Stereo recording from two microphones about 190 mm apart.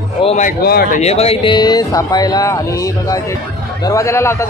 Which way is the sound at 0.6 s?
55° left (ahead or behind).